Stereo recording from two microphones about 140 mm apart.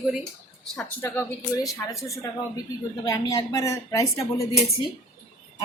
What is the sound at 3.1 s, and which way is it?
Speech, 25° left (ahead or behind).